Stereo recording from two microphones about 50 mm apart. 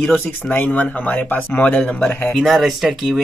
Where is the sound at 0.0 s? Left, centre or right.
Left.